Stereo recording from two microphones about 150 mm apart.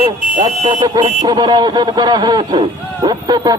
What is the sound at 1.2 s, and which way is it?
Speech, 30° right (ahead or behind).